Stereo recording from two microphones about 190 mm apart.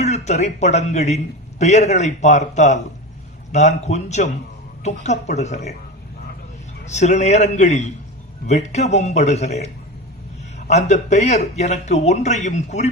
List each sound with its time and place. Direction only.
0.0 s a man's voice: 35° left (ahead or behind)
6.8 s a man's voice: 35° left (ahead or behind)
10.7 s a man's voice: 35° left (ahead or behind)